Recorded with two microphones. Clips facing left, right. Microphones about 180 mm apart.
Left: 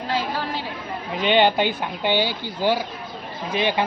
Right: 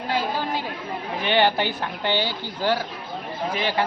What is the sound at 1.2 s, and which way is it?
A man's voice, 15° left (ahead or behind).